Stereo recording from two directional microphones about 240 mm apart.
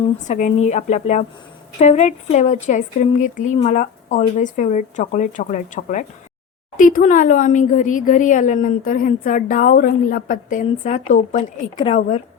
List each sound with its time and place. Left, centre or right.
0.3 s a woman's voice: left